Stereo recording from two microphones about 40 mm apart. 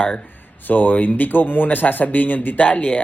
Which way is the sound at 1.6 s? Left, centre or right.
Left.